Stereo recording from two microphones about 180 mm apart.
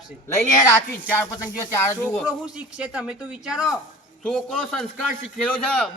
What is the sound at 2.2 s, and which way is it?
A man's voice, 5° right (ahead or behind).